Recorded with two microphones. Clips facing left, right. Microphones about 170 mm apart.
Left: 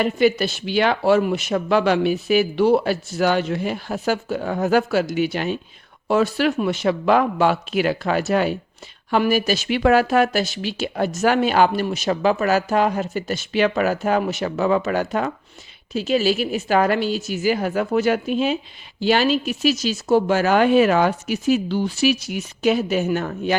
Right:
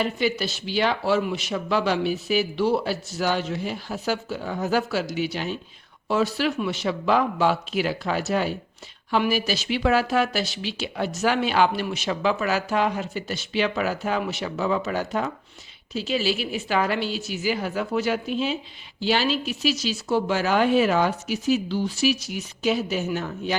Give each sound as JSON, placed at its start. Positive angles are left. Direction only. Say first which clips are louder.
{"t": 0.0, "sound": "speech", "louder": "left 6 dB", "side_deg": 55}
{"t": 9.0, "sound": "speech", "louder": "left 4 dB", "side_deg": 50}
{"t": 15.9, "sound": "speech", "louder": "left 6 dB", "side_deg": 50}